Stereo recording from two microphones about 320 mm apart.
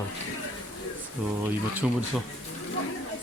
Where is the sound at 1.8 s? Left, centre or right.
Centre.